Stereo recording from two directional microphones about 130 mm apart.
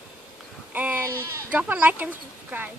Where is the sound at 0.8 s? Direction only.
15° right (ahead or behind).